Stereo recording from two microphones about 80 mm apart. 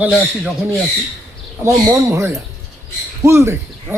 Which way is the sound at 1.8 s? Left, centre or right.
Right.